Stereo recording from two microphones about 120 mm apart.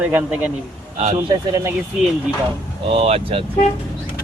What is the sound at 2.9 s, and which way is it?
Speech, 55° right (ahead or behind).